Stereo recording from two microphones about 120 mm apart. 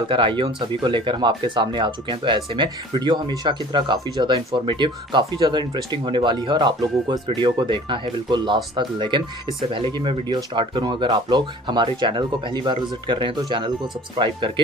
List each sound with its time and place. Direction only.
0.1 s speech: 45° right (ahead or behind)